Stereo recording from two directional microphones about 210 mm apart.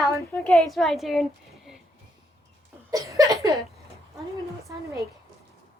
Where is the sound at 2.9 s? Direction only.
15° right (ahead or behind).